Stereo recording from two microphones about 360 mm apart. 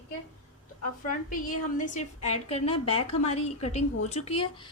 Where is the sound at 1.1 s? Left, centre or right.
Left.